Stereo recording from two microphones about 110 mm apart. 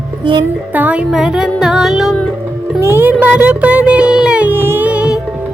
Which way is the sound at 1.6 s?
5° right (ahead or behind).